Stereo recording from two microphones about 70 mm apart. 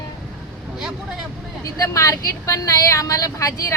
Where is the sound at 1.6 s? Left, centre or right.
Left.